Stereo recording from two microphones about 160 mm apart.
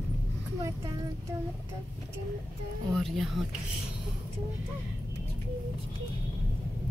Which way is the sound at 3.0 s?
Centre (ahead or behind).